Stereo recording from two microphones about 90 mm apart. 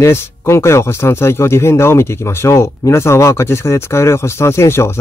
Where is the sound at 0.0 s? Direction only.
30° left (ahead or behind).